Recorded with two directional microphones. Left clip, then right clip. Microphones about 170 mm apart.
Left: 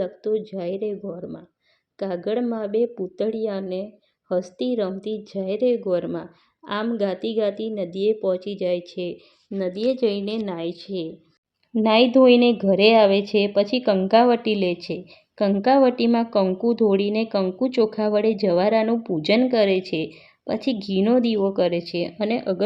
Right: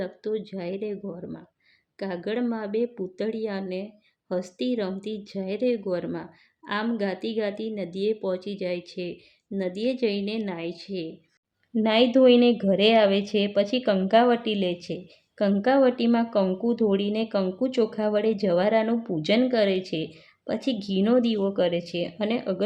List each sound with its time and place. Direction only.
0.0 s a woman's voice: 5° left (ahead or behind)